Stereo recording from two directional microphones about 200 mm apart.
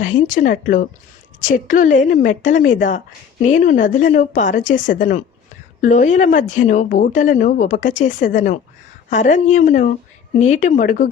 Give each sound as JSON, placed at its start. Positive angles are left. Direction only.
{"t": 0.0, "sound": "a woman's voice", "side_deg": 40}